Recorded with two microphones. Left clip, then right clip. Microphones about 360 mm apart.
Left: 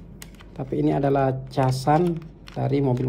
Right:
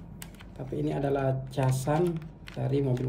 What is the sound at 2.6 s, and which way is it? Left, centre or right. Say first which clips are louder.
Speech: left 6 dB; centre.